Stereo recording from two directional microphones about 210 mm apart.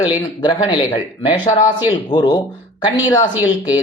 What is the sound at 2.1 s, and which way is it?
Speech, 20° left (ahead or behind).